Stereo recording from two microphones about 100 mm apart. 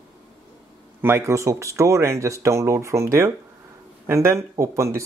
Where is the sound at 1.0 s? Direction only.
25° right (ahead or behind).